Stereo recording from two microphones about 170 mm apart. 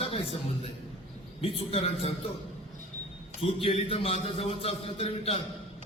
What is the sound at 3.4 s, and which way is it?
Speech, 35° left (ahead or behind).